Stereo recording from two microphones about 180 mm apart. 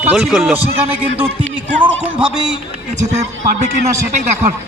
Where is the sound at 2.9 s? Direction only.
40° right (ahead or behind).